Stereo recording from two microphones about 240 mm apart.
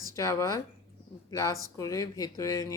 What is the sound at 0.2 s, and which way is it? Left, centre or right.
Speech, centre.